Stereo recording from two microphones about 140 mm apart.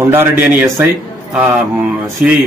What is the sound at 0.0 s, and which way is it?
Speech, 15° right (ahead or behind).